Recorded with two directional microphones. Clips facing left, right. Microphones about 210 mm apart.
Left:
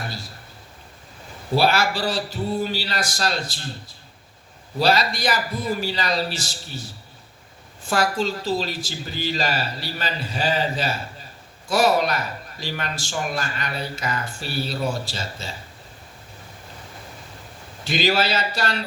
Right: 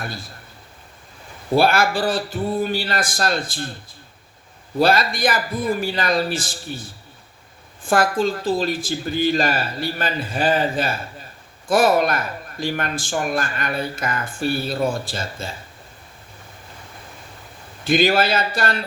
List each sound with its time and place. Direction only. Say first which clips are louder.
1.5 s speech: right 3 dB; 50° right (ahead or behind)
4.8 s speech: right 3 dB; 50° right (ahead or behind)
17.8 s speech: right 4 dB; 55° right (ahead or behind)